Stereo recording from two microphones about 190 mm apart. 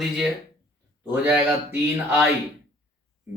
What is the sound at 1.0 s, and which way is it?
Speech, 10° right (ahead or behind).